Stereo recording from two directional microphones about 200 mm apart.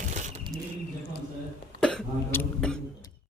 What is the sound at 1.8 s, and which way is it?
Cough, 5° left (ahead or behind).